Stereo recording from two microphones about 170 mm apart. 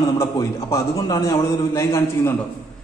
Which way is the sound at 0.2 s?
20° left (ahead or behind).